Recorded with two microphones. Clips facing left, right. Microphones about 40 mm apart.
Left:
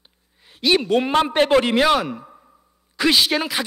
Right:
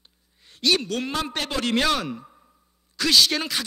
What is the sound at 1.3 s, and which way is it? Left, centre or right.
Speech, left.